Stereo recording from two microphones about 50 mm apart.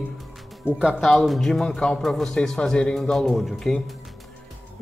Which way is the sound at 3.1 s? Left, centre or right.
Centre.